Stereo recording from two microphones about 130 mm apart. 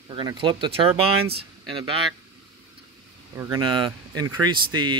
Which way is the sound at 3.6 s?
35° right (ahead or behind).